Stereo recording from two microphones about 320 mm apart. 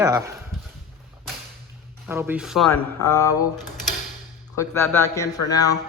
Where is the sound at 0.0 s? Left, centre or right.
Centre.